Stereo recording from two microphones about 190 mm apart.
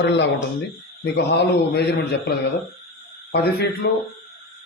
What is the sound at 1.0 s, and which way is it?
Speech, 65° left (ahead or behind).